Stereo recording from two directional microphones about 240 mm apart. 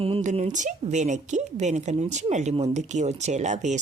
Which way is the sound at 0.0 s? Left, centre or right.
Right.